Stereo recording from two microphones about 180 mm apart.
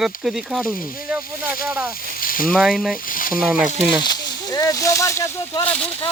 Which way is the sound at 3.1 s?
50° left (ahead or behind).